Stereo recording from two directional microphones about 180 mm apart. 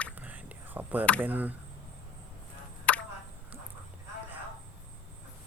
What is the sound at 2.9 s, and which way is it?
Chop, 5° left (ahead or behind).